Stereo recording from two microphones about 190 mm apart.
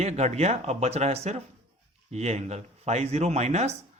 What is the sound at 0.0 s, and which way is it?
Speech, 35° right (ahead or behind).